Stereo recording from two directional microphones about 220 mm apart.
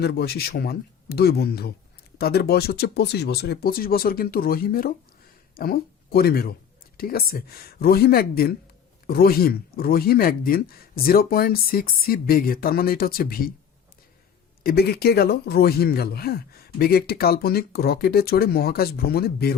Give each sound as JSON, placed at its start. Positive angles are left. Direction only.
{"t": 0.0, "sound": "speech", "side_deg": 45}
{"t": 14.6, "sound": "speech", "side_deg": 45}